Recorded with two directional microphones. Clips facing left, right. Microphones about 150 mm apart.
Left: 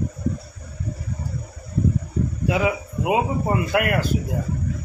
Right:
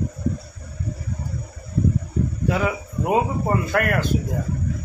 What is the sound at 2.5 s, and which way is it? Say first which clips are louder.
Speech: left 3 dB; 5° left (ahead or behind).